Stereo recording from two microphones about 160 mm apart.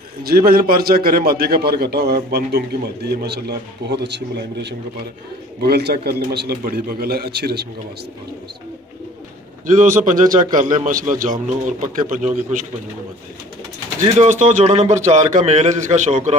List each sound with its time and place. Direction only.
0.2 s a man's voice: 70° right (ahead or behind)
9.7 s a man's voice: 55° right (ahead or behind)
14.2 s a man's voice: 50° right (ahead or behind)